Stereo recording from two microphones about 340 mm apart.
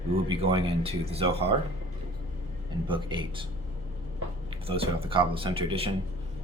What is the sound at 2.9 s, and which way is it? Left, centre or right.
Speech, centre.